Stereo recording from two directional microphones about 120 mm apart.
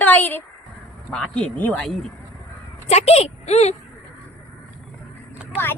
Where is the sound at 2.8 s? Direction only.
60° left (ahead or behind).